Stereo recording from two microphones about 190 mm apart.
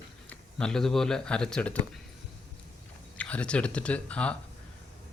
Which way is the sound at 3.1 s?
5° left (ahead or behind).